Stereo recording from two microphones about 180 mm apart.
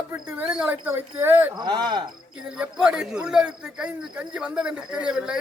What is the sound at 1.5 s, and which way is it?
Speech, 25° right (ahead or behind).